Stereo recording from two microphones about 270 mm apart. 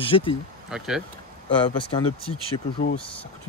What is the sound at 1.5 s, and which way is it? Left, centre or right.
Speech, centre.